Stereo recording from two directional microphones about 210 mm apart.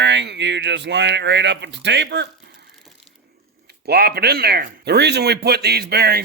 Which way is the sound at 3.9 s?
50° right (ahead or behind).